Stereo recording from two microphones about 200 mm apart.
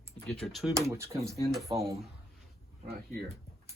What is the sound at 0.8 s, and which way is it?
Speech, 15° right (ahead or behind).